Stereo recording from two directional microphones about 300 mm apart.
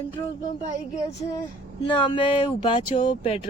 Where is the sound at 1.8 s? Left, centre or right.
Centre.